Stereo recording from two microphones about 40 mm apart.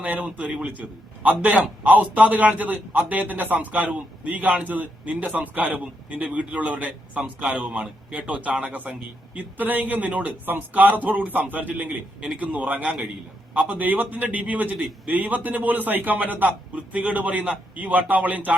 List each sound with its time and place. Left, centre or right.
0.0 s a man's voice: right